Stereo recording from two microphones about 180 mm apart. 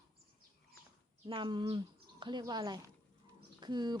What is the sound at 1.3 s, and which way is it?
Speech, 25° right (ahead or behind).